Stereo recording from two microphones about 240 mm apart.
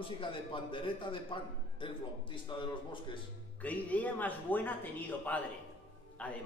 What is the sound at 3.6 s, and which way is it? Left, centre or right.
A woman's voice, centre.